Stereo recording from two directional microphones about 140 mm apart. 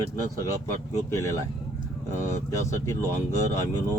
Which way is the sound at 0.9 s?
20° left (ahead or behind).